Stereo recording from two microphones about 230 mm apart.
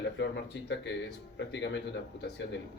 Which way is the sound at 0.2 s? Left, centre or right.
Left.